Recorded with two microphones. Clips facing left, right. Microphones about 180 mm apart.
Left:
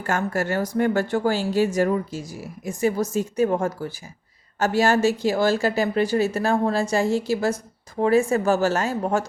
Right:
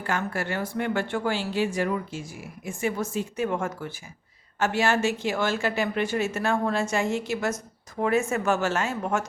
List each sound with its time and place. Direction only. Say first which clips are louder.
0.0 s speech: left 4 dB; 45° left (ahead or behind)